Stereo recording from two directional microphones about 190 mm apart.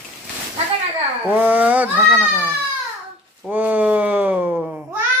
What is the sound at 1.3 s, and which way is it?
Speech, 10° right (ahead or behind).